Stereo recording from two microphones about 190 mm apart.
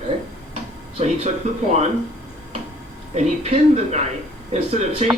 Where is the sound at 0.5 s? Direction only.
35° right (ahead or behind).